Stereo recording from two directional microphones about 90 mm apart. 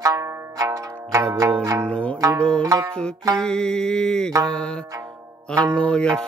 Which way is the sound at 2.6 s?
45° right (ahead or behind).